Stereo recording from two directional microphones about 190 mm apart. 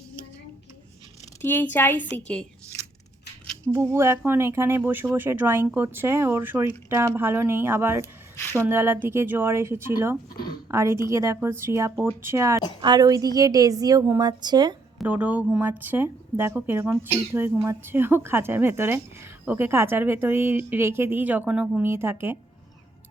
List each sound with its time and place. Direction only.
1.4 s a woman's voice: 10° left (ahead or behind)
3.7 s a woman's voice: 15° right (ahead or behind)
14.9 s speech: 10° right (ahead or behind)